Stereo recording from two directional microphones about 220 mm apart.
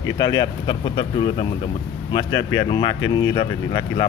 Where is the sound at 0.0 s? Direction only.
20° left (ahead or behind).